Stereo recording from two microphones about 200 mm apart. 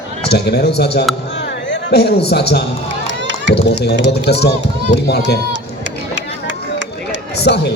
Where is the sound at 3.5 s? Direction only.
55° left (ahead or behind).